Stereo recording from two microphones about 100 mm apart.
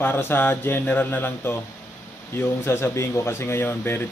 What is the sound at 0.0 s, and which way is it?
Speech, 20° left (ahead or behind).